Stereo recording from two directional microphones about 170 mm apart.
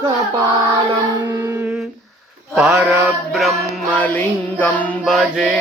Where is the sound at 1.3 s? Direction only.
20° right (ahead or behind).